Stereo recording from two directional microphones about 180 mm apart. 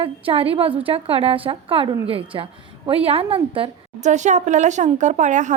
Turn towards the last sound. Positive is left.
turn(degrees=-40)  # may be behind; listen again after turning